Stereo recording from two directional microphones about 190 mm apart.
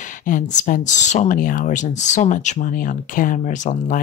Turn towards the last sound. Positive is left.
turn(degrees=45)  # may be behind; listen again after turning